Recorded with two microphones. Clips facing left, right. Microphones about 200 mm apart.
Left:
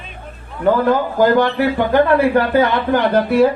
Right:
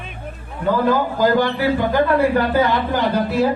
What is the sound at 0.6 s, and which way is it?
Speech, 65° left (ahead or behind).